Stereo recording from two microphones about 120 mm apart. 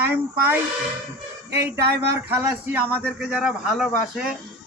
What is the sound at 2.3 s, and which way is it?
Speech, 20° right (ahead or behind).